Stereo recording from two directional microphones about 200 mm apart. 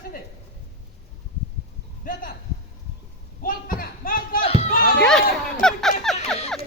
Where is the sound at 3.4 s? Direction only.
45° left (ahead or behind).